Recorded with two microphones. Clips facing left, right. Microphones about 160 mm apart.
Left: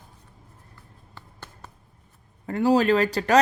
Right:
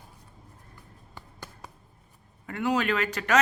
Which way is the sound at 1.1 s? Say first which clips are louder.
Right 1 dB; 10° right (ahead or behind).